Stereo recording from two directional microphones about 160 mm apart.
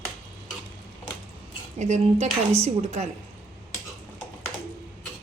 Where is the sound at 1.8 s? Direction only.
50° right (ahead or behind).